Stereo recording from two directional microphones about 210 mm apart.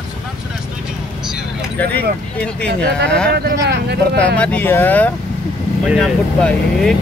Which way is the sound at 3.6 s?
55° right (ahead or behind).